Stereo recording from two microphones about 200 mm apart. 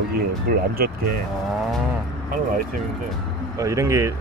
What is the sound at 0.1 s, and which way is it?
Speech, 45° right (ahead or behind).